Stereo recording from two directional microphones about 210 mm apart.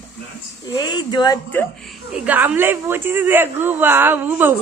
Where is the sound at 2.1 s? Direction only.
10° right (ahead or behind).